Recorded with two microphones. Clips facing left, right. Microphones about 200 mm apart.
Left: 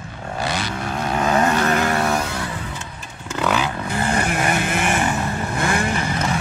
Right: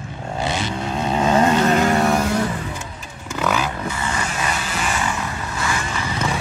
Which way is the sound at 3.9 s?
60° left (ahead or behind).